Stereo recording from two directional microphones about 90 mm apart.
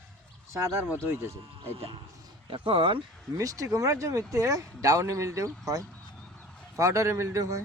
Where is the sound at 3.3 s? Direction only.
35° right (ahead or behind).